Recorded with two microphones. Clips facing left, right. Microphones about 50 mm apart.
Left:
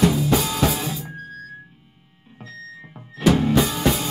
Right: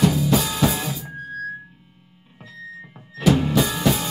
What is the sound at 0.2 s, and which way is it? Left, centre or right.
Music, left.